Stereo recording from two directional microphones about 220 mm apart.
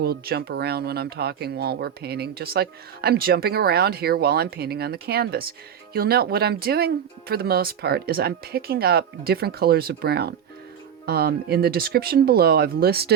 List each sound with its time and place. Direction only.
0.0 s speech: 45° right (ahead or behind)